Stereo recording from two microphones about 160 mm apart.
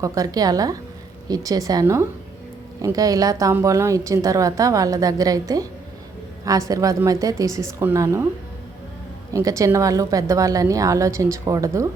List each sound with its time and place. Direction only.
0.0 s a woman's voice: 20° right (ahead or behind)
9.3 s a woman's voice: 20° right (ahead or behind)